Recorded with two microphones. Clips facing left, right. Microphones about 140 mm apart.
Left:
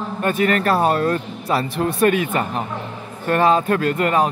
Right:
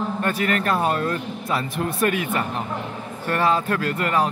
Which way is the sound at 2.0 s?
25° left (ahead or behind).